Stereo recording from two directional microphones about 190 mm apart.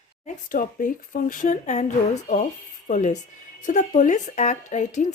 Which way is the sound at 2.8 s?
40° left (ahead or behind).